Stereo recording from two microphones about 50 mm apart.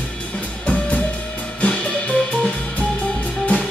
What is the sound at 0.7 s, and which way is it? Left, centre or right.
Music, left.